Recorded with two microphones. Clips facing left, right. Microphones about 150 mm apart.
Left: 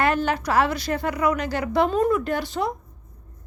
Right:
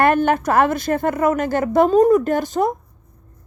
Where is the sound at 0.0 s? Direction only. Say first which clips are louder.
Right 6 dB; 55° right (ahead or behind).